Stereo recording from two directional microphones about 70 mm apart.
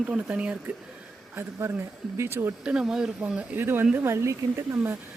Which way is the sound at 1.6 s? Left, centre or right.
Right.